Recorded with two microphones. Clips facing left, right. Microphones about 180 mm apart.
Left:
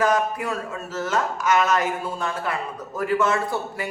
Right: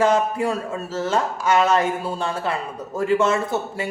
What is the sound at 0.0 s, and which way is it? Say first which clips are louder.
Speech: right 3 dB; 25° right (ahead or behind).